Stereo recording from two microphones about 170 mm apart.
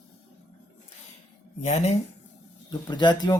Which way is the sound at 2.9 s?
25° left (ahead or behind).